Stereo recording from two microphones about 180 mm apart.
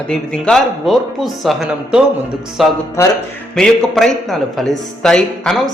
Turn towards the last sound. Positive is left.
turn(degrees=0)  # may be behind; listen again after turning